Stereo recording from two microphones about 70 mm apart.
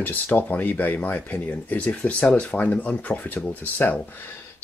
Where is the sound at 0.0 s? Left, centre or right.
Left.